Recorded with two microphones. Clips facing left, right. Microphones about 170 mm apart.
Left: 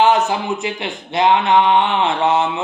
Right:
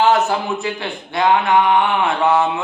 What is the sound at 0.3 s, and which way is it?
A man's voice, 20° left (ahead or behind).